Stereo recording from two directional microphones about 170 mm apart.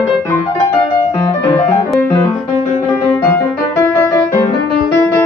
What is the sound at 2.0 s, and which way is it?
Music, 15° left (ahead or behind).